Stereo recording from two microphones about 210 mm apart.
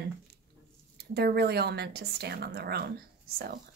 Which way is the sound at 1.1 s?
50° right (ahead or behind).